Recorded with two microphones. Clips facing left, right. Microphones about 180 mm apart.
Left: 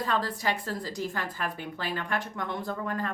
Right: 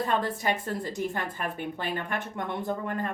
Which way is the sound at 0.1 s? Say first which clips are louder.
Right 2 dB; 20° right (ahead or behind).